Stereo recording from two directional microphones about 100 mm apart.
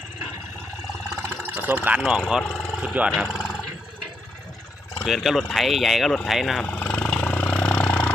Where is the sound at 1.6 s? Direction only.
20° right (ahead or behind).